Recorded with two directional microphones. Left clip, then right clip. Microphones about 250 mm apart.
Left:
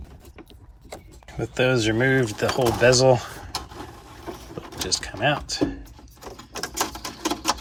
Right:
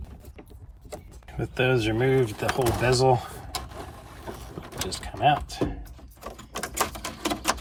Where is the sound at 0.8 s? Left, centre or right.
Centre.